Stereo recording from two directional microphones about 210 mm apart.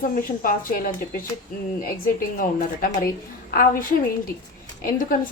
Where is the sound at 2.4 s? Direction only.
40° left (ahead or behind).